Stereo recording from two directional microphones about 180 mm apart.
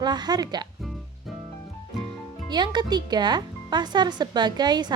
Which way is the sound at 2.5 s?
25° right (ahead or behind).